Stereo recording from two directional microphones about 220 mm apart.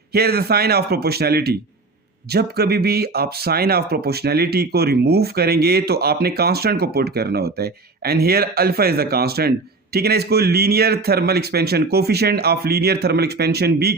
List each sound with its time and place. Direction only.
0.1 s speech: 45° right (ahead or behind)